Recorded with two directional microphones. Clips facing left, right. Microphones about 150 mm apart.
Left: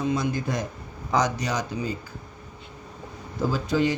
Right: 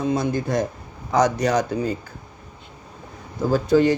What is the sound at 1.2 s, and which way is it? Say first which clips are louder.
Speech: right 8 dB; 55° right (ahead or behind).